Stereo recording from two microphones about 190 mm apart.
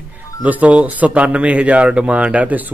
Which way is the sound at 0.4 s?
5° right (ahead or behind).